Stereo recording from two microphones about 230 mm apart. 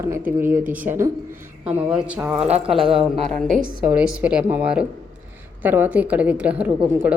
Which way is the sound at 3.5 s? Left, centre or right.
Right.